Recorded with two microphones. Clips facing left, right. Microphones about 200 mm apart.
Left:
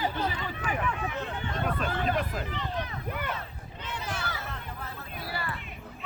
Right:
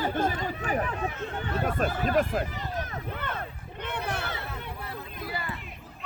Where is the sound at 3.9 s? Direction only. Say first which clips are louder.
Right 3 dB; 60° right (ahead or behind).